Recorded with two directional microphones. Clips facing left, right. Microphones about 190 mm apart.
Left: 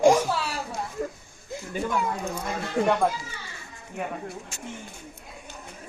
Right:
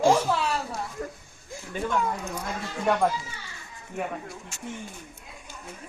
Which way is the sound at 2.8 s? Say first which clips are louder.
Left 3 dB; 60° left (ahead or behind).